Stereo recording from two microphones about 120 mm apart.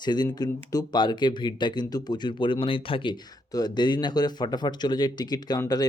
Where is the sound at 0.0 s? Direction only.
35° left (ahead or behind).